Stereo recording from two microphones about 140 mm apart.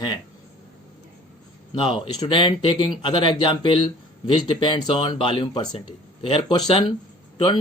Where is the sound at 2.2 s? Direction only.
35° left (ahead or behind).